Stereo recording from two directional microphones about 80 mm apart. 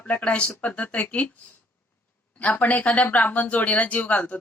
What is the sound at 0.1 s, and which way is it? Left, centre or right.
Speech, centre.